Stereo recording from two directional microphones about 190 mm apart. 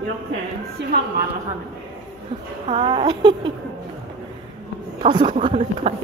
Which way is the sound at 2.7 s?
25° right (ahead or behind).